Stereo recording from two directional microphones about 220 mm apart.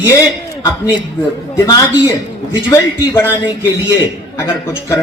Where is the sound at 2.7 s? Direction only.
10° left (ahead or behind).